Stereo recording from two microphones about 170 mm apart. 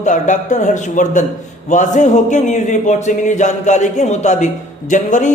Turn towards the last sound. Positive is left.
turn(degrees=50)  # may be behind; listen again after turning